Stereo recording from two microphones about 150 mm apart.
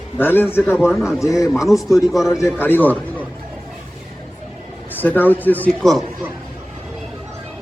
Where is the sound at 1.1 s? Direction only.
20° left (ahead or behind).